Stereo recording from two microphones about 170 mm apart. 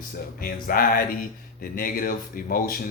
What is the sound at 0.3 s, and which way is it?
Speech, 60° left (ahead or behind).